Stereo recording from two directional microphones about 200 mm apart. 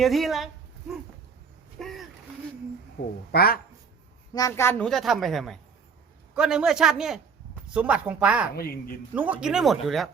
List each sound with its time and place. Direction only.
0.0 s a sound: centre (ahead or behind)
3.3 s speech: 50° left (ahead or behind)
4.4 s a woman's voice: 15° left (ahead or behind); by 8.4 s 5° right (ahead or behind)
8.5 s speech: 50° left (ahead or behind)
9.1 s a woman's voice: 5° right (ahead or behind)